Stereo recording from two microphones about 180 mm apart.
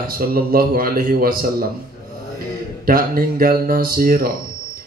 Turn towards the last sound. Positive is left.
turn(degrees=-55)  # may be behind; listen again after turning